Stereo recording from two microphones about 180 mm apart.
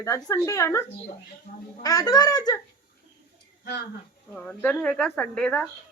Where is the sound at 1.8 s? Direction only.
20° left (ahead or behind).